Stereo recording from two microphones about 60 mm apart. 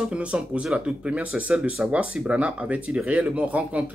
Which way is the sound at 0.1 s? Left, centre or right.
Centre.